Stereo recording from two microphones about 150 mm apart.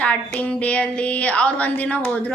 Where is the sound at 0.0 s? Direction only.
10° left (ahead or behind).